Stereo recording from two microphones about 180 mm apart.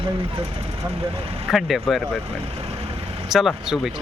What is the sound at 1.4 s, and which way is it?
Speech, centre (ahead or behind).